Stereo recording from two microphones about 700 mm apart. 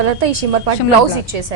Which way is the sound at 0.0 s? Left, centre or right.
Right.